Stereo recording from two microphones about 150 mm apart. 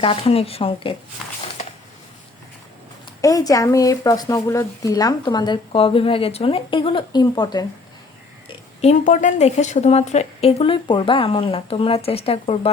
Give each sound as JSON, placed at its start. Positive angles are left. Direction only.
{"t": 0.0, "sound": "speech", "side_deg": 40}
{"t": 3.2, "sound": "speech", "side_deg": 25}
{"t": 8.4, "sound": "speech", "side_deg": 45}